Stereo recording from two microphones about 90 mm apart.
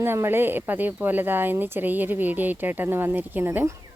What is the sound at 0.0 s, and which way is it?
Speech, 25° right (ahead or behind).